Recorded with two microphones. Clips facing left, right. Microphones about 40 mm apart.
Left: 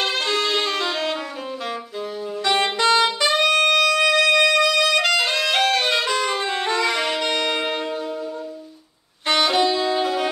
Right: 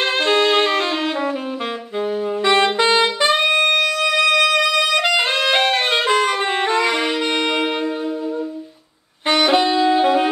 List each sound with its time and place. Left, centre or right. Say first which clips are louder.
0.0 s music: right 5 dB; right
2.4 s saxophone: right 4 dB; right
2.9 s brass instrument: right 2 dB; right
4.1 s music: right 1 dB; right
9.3 s saxophone: right 3 dB; right